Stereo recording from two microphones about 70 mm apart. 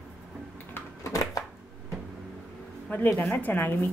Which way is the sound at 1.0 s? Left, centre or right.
Left.